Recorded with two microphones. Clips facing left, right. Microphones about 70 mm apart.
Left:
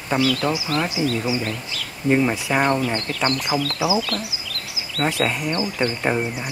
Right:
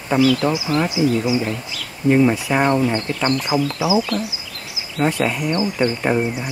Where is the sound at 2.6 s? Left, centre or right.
Centre.